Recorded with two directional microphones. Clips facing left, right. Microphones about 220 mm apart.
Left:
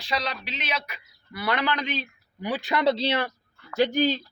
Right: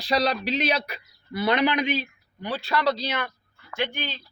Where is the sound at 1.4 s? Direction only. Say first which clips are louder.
Right 5 dB; 20° right (ahead or behind).